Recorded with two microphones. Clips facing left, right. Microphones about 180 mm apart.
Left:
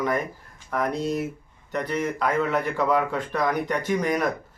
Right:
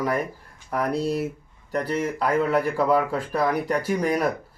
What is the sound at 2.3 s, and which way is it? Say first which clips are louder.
A man's voice: right 6 dB; 10° right (ahead or behind).